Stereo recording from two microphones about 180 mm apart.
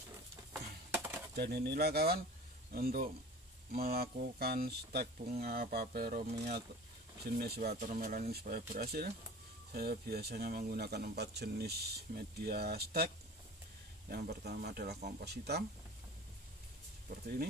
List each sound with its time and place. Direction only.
0.5 s a sound: 10° right (ahead or behind)
1.3 s speech: 60° right (ahead or behind)
7.3 s speech: 60° right (ahead or behind)
7.8 s speech: 45° right (ahead or behind); by 15.6 s 65° right (ahead or behind)